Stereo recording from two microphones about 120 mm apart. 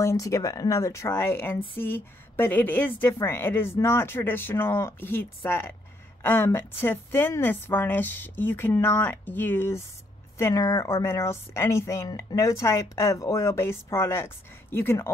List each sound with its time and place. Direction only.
0.0 s a woman's voice: 25° left (ahead or behind)